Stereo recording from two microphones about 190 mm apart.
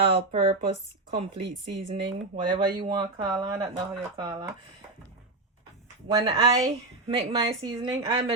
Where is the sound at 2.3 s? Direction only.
25° right (ahead or behind).